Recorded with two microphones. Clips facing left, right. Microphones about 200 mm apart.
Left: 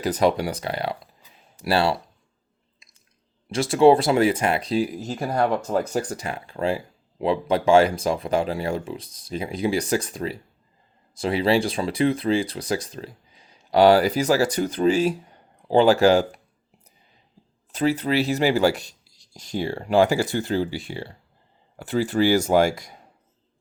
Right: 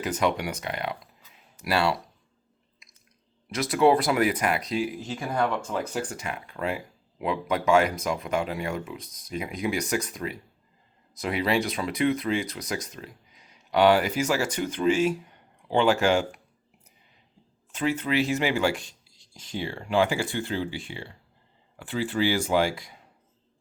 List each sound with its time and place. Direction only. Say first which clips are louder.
0.0 s speech: left 5 dB; 35° left (ahead or behind)
2.8 s drip: even; 25° left (ahead or behind)
3.5 s speech: left 5 dB; 30° left (ahead or behind)
17.7 s speech: left 4 dB; 35° left (ahead or behind)